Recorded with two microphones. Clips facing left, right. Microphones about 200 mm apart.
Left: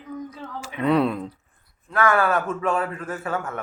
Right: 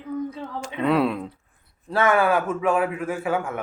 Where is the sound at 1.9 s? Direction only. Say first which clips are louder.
Right 1 dB; 25° right (ahead or behind).